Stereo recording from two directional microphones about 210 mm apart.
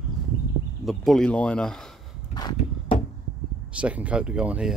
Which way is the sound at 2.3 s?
20° left (ahead or behind).